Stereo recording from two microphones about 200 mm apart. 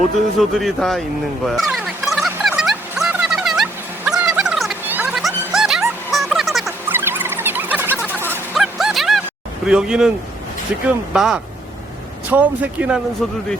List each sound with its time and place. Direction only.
0.3 s a man's voice: centre (ahead or behind)
1.5 s music: centre (ahead or behind)
6.1 s a sound: centre (ahead or behind)
9.6 s a man's voice: 5° right (ahead or behind)